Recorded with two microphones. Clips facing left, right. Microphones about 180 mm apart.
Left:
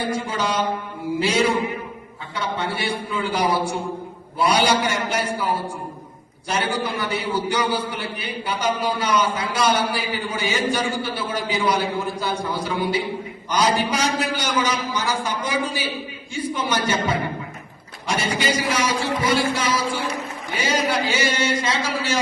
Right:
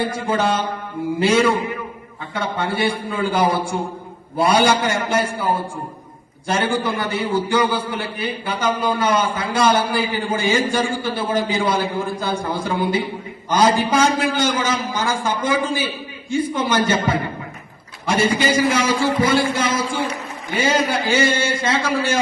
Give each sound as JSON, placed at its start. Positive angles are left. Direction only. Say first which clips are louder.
{"t": 0.3, "sound": "a man's voice", "louder": "right 3 dB", "side_deg": -50}
{"t": 6.7, "sound": "a man's voice", "louder": "right 3 dB", "side_deg": -50}
{"t": 18.0, "sound": "a man's voice", "louder": "right 5 dB", "side_deg": -50}